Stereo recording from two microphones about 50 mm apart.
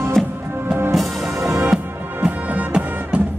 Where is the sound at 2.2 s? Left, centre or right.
Right.